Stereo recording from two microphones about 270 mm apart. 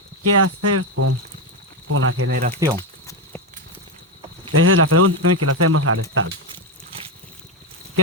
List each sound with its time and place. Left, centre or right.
0.2 s speech: right
2.7 s a sound: centre
4.5 s speech: right